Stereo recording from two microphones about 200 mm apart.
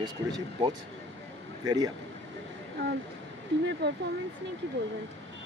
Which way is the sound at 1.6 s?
20° right (ahead or behind).